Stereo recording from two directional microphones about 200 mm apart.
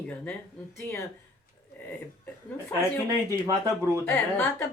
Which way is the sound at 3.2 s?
15° right (ahead or behind).